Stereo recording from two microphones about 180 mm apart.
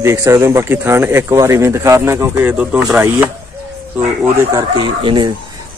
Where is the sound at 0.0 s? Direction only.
15° right (ahead or behind).